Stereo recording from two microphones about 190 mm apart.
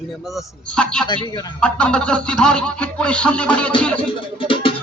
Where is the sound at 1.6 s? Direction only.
5° left (ahead or behind).